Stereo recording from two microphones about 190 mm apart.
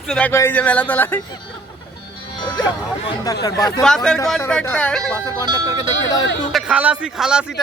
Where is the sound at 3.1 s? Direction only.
20° left (ahead or behind).